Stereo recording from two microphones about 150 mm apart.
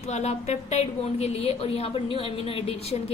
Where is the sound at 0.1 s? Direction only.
45° left (ahead or behind).